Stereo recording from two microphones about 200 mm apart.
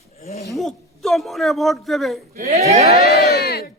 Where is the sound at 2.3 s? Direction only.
35° right (ahead or behind).